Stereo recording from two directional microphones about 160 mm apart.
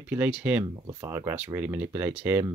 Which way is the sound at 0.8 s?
20° right (ahead or behind).